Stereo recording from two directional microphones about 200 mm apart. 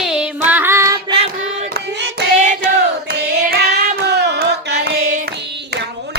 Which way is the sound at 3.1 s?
55° right (ahead or behind).